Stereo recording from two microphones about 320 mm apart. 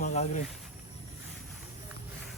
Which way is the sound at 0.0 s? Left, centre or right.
Left.